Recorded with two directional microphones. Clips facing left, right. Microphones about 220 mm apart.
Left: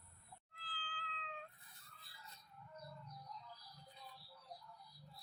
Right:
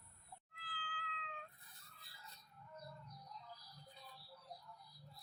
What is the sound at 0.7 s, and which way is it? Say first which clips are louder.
Cat: right 1 dB; 30° left (ahead or behind).